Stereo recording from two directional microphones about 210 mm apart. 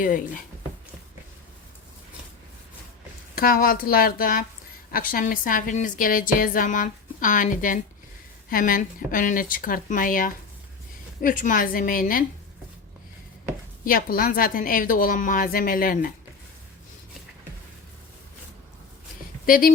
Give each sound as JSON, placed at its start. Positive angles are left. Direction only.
{"t": 3.3, "sound": "a woman's voice", "side_deg": 45}
{"t": 13.8, "sound": "a woman's voice", "side_deg": 45}
{"t": 19.5, "sound": "a woman's voice", "side_deg": 40}